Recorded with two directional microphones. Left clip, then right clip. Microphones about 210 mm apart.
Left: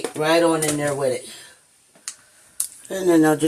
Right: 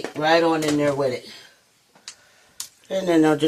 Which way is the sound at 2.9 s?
30° right (ahead or behind).